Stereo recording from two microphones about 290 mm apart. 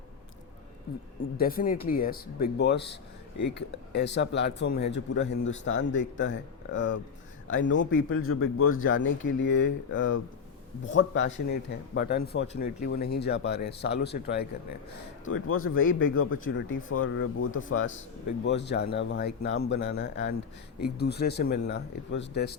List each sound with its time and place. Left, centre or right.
0.9 s speech: left
3.9 s speech: left
15.3 s speech: left